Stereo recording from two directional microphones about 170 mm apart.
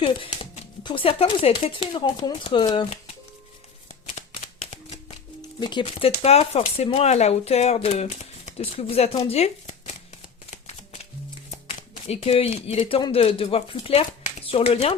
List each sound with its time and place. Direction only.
0.0 s speech: 35° left (ahead or behind)
4.2 s shuffling cards: 40° left (ahead or behind)
4.7 s a sound: 40° left (ahead or behind)
5.5 s speech: 25° left (ahead or behind)
11.5 s speech: 40° left (ahead or behind)